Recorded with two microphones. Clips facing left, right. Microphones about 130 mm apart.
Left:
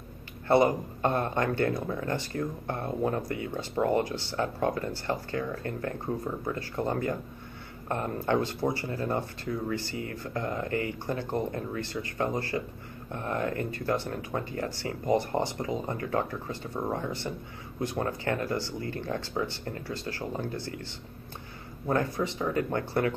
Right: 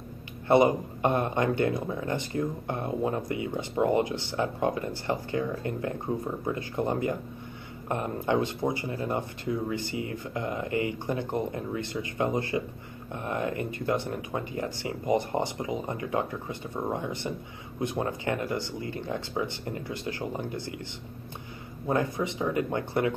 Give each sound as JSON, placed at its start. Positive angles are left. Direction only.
{"t": 0.5, "sound": "a man's voice", "side_deg": -20}
{"t": 21.8, "sound": "a man's voice", "side_deg": -20}